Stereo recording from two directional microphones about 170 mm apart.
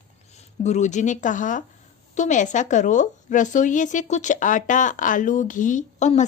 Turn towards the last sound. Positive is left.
turn(degrees=45)  # may be behind; listen again after turning